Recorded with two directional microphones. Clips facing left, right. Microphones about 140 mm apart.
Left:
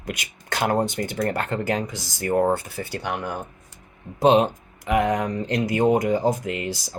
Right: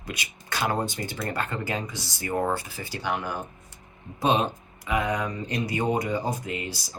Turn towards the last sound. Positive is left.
turn(degrees=70)  # may be behind; listen again after turning